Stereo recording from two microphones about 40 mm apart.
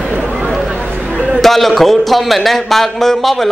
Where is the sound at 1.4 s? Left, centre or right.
Centre.